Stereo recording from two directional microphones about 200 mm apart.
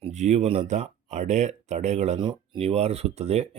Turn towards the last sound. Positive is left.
turn(degrees=-30)  # may be behind; listen again after turning